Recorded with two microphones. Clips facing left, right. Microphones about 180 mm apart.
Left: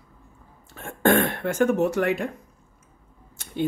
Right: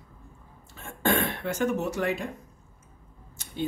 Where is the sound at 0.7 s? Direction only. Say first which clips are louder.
Left 6 dB; 55° left (ahead or behind).